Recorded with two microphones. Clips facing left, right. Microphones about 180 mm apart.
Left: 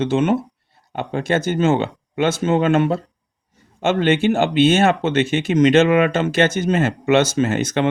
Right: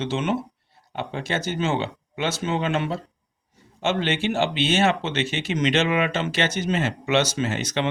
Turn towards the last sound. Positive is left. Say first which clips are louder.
# left 7 dB
turn(degrees=50)  # may be behind; listen again after turning